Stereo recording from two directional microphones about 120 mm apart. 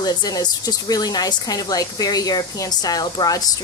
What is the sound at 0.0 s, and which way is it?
Speech, 35° left (ahead or behind).